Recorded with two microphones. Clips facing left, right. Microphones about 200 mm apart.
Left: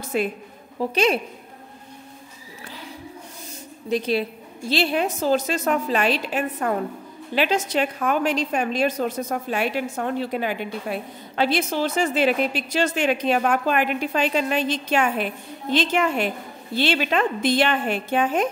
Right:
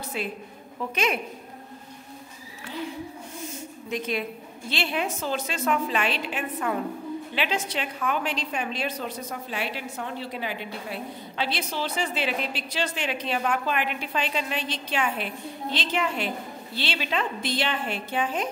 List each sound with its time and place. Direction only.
0.1 s a woman's voice: 50° left (ahead or behind)
0.7 s a woman's voice: 35° left (ahead or behind)
3.9 s a woman's voice: 35° left (ahead or behind); by 18.5 s 50° left (ahead or behind)